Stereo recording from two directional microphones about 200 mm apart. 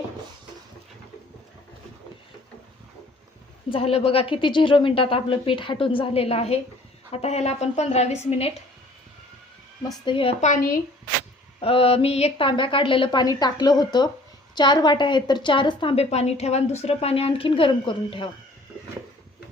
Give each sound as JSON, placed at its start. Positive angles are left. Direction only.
{"t": 3.7, "sound": "a woman's voice", "side_deg": 30}
{"t": 10.1, "sound": "a woman's voice", "side_deg": 25}
{"t": 11.6, "sound": "a woman's voice", "side_deg": 30}